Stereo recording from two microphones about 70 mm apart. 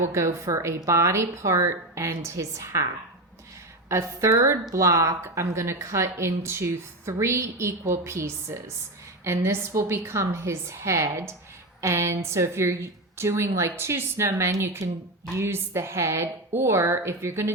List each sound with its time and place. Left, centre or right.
0.0 s a woman's voice: right
3.8 s a woman's voice: right